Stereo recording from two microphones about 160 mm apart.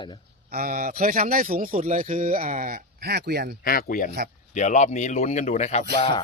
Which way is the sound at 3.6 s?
70° left (ahead or behind).